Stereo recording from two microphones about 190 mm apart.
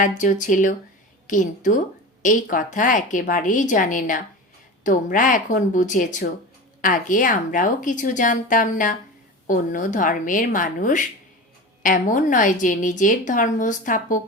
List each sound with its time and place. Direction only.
0.0 s a woman's voice: 40° left (ahead or behind)